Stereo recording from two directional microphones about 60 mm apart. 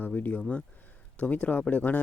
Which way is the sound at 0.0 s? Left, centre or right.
Left.